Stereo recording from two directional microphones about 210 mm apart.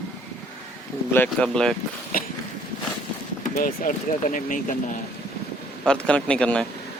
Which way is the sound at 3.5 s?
40° left (ahead or behind).